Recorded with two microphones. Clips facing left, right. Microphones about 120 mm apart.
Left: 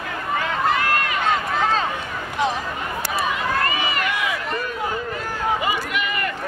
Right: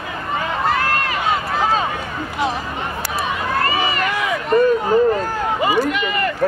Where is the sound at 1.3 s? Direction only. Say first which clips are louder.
Right 2 dB; 10° right (ahead or behind).